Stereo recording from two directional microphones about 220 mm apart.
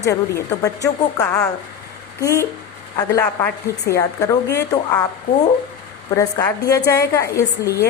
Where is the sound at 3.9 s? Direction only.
15° left (ahead or behind).